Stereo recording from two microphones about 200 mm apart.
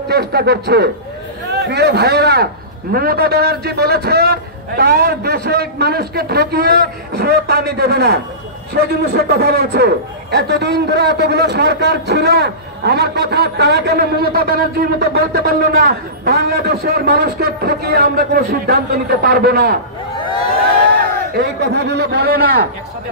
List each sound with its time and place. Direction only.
0.1 s a man's voice: 55° right (ahead or behind)
21.4 s a man's voice: 60° right (ahead or behind)